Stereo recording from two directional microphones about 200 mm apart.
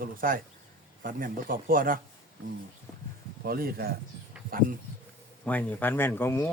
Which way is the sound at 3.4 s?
50° right (ahead or behind).